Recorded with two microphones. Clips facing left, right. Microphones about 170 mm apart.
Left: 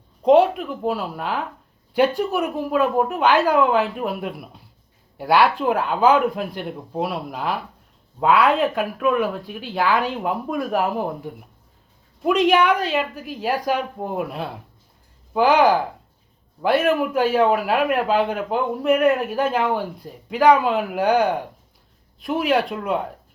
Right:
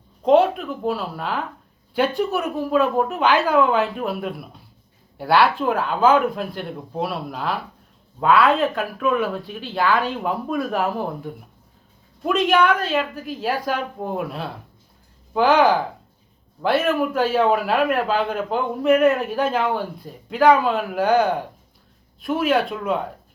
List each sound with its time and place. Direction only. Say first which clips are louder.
0.3 s speech: left 1 dB; 10° left (ahead or behind)
15.3 s speech: even; 10° left (ahead or behind)
22.4 s speech: even; centre (ahead or behind)